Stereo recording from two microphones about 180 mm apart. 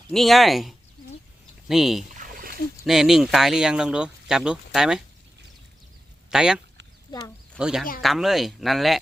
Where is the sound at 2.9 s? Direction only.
Centre (ahead or behind).